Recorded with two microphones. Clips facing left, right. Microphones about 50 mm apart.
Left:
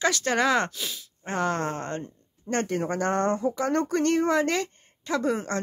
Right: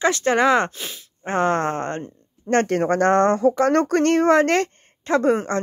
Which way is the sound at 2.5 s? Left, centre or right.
Right.